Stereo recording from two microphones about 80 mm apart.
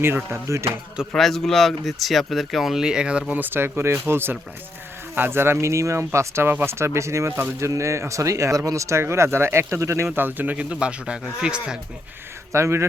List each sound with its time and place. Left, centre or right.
0.3 s speech: right
1.1 s speech: centre
3.4 s speech: right
7.7 s speech: right
10.1 s speech: right
12.5 s speech: right